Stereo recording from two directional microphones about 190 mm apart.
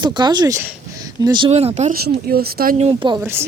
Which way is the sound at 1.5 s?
35° right (ahead or behind).